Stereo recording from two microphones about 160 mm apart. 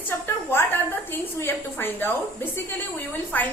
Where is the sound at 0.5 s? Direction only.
15° left (ahead or behind).